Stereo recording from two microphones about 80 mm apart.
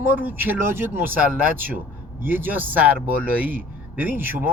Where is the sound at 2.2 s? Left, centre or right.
Right.